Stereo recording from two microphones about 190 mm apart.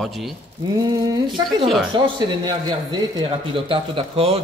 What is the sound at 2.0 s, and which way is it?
A man's voice, 20° right (ahead or behind).